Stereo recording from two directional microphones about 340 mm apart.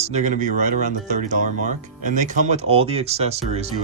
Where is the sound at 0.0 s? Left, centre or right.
Centre.